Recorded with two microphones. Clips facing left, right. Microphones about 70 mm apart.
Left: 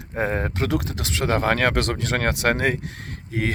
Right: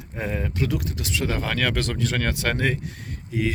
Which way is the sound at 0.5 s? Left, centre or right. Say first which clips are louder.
Left 1 dB; left.